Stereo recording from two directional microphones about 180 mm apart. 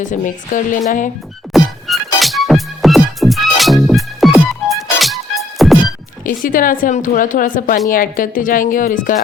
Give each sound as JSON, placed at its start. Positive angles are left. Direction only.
{"t": 0.0, "sound": "a woman's voice", "side_deg": 45}
{"t": 1.5, "sound": "music", "side_deg": 0}
{"t": 6.2, "sound": "a woman's voice", "side_deg": 50}